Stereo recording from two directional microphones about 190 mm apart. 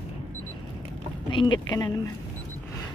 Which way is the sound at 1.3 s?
25° left (ahead or behind).